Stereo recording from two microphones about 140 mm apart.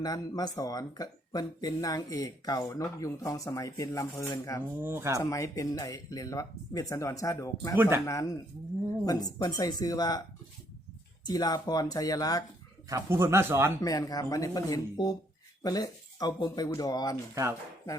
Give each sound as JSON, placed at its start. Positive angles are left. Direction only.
{"t": 0.0, "sound": "speech", "side_deg": 25}
{"t": 4.8, "sound": "speech", "side_deg": -20}
{"t": 5.2, "sound": "speech", "side_deg": 25}
{"t": 7.8, "sound": "speech", "side_deg": -15}
{"t": 8.0, "sound": "speech", "side_deg": 25}
{"t": 11.3, "sound": "speech", "side_deg": 25}
{"t": 12.9, "sound": "speech", "side_deg": -20}
{"t": 13.8, "sound": "speech", "side_deg": 25}